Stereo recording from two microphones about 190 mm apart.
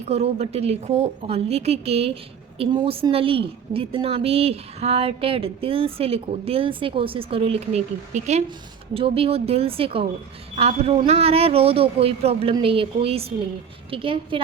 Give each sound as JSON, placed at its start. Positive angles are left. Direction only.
{"t": 0.1, "sound": "a woman's voice", "side_deg": -35}